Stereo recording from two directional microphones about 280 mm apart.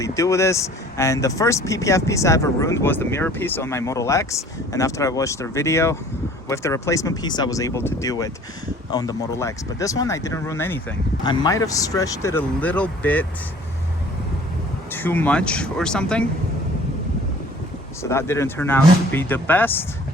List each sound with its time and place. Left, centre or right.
0.0 s speech: centre
14.9 s speech: centre
18.0 s speech: centre